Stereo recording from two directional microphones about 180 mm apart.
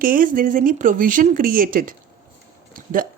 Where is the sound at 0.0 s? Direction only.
50° right (ahead or behind).